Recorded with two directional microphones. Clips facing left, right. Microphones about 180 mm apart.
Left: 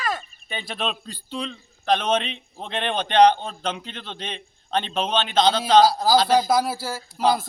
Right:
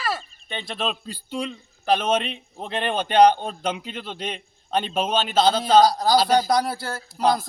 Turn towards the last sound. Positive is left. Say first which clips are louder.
# even
turn(degrees=5)  # may be behind; listen again after turning